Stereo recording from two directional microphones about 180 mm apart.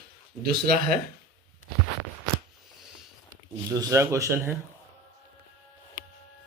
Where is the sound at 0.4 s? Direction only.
55° right (ahead or behind).